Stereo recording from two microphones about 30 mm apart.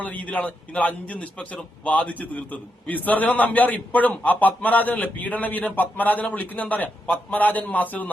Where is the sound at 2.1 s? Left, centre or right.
Left.